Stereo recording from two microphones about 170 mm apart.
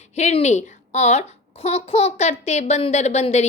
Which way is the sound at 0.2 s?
40° left (ahead or behind).